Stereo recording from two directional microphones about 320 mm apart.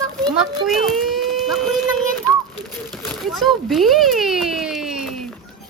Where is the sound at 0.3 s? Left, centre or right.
Centre.